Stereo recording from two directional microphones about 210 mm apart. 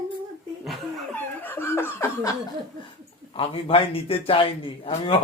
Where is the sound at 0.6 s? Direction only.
Centre (ahead or behind).